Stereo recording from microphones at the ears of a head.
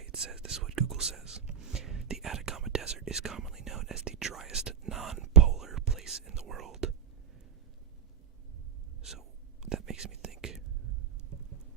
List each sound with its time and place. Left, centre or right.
0.0 s whispering: right
9.6 s whispering: right